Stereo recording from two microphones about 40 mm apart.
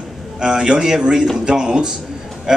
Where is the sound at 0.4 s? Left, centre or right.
Centre.